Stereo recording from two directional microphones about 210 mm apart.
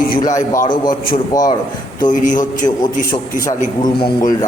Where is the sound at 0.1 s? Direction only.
40° left (ahead or behind).